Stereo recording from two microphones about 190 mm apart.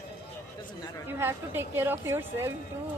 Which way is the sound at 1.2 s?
10° right (ahead or behind).